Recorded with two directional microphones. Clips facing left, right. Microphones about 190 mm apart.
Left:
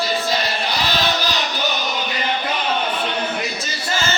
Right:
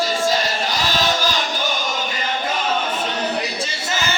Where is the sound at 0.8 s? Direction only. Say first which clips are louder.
Even; 45° right (ahead or behind).